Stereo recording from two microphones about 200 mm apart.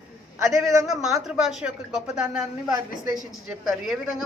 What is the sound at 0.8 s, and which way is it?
Speech, centre (ahead or behind).